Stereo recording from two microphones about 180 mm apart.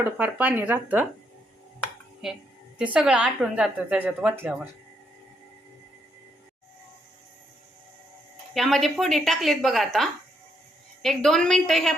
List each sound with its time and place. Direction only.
0.0 s a woman's voice: 10° right (ahead or behind)
2.2 s a woman's voice: centre (ahead or behind)
8.5 s a woman's voice: centre (ahead or behind)